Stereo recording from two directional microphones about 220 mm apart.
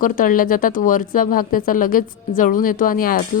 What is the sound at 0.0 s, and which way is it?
Speech, 40° left (ahead or behind).